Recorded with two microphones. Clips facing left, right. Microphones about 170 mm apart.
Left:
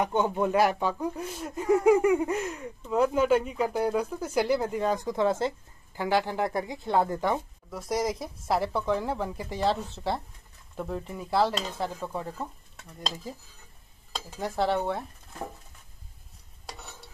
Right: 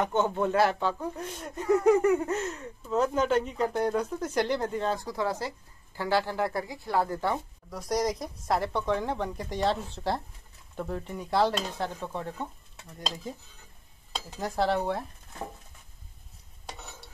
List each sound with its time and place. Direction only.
0.0 s speech: 10° left (ahead or behind)
7.7 s speech: 5° left (ahead or behind)
16.6 s a sound: centre (ahead or behind)